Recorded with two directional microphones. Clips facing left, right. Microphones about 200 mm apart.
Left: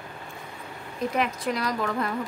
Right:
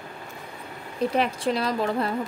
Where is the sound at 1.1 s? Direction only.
30° right (ahead or behind).